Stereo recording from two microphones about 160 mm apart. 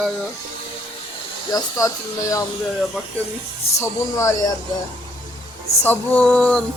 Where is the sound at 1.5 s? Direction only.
20° left (ahead or behind).